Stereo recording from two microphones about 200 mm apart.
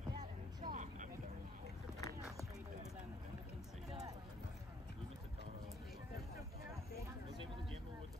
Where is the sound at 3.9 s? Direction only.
15° right (ahead or behind).